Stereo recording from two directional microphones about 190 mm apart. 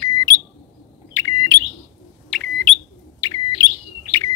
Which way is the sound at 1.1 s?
15° left (ahead or behind).